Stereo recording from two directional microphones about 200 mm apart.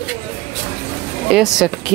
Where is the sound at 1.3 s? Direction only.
Centre (ahead or behind).